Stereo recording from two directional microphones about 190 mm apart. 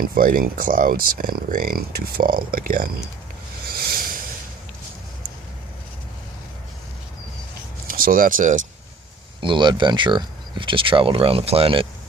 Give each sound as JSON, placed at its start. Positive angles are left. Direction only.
{"t": 0.0, "sound": "speech", "side_deg": -50}
{"t": 3.7, "sound": "a sound", "side_deg": -55}
{"t": 7.9, "sound": "speech", "side_deg": -50}
{"t": 9.4, "sound": "speech", "side_deg": -25}